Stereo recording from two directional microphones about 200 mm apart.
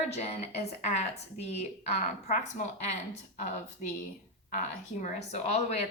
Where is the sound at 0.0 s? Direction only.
35° left (ahead or behind).